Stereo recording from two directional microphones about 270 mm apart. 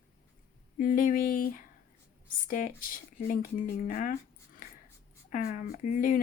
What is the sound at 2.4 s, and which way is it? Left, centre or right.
Speech, left.